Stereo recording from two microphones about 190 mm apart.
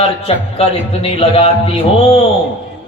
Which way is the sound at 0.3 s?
30° left (ahead or behind).